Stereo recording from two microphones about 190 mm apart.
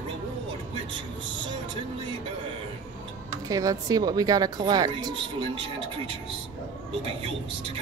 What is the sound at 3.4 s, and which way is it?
A woman's voice, 20° right (ahead or behind).